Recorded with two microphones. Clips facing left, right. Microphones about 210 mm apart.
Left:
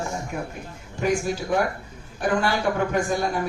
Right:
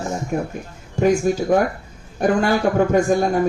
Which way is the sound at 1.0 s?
45° right (ahead or behind).